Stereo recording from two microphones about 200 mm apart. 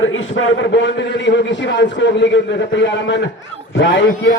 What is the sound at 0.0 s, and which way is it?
A man's voice, 75° left (ahead or behind).